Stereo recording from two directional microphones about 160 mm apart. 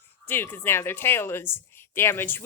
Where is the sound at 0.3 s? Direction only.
15° left (ahead or behind).